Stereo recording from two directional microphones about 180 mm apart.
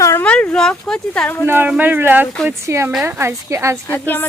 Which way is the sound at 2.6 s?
15° right (ahead or behind).